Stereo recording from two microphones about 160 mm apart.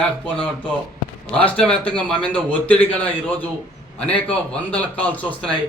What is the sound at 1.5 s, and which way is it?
A man's voice, 5° left (ahead or behind).